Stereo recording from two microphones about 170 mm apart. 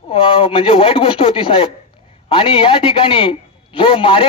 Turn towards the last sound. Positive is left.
turn(degrees=30)  # may be behind; listen again after turning